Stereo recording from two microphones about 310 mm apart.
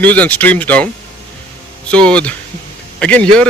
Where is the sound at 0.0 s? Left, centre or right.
Centre.